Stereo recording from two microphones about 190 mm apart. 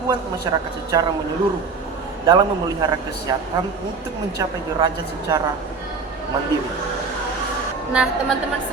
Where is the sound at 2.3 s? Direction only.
20° right (ahead or behind).